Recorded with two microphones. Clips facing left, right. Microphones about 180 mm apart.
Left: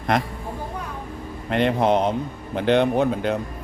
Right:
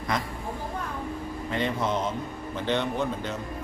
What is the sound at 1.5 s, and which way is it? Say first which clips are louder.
A man's voice: left 9 dB; 70° left (ahead or behind).